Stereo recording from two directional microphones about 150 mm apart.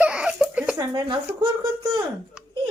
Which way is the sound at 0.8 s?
30° right (ahead or behind).